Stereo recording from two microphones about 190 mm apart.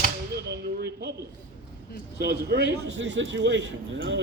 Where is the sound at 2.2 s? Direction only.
60° right (ahead or behind).